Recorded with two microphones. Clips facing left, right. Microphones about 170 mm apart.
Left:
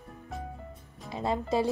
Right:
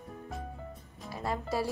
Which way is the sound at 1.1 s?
20° left (ahead or behind).